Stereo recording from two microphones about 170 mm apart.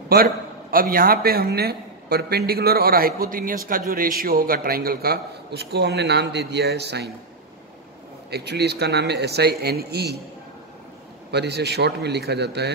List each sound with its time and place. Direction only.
0.1 s a man's voice: 60° right (ahead or behind); by 7.1 s 75° right (ahead or behind)
8.3 s speech: 75° right (ahead or behind)
11.3 s a man's voice: 80° right